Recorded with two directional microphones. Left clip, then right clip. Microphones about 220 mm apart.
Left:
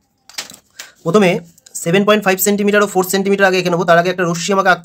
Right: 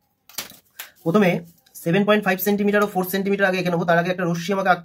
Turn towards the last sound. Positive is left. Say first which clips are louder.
# left 7 dB
turn(degrees=30)  # may be behind; listen again after turning